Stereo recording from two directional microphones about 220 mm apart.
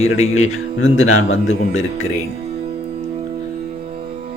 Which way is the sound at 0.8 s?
65° left (ahead or behind).